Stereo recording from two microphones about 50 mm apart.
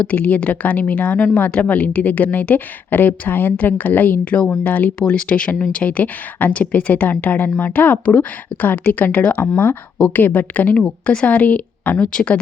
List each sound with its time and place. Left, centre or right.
0.0 s speech: left
4.3 s speech: left
4.6 s speech: left
4.9 s speech: left
9.4 s speech: left
10.8 s speech: centre
12.0 s speech: left